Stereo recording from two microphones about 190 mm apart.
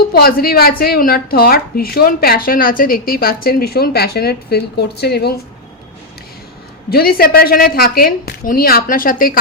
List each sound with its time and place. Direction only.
0.1 s speech: 55° left (ahead or behind)
6.9 s speech: 55° left (ahead or behind)